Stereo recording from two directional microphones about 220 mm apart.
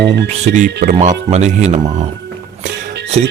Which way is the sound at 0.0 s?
50° right (ahead or behind).